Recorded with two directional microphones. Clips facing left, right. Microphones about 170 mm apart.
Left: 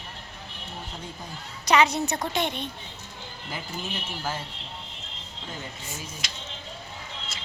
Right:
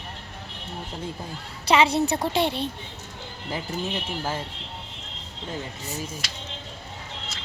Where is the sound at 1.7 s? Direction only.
30° right (ahead or behind).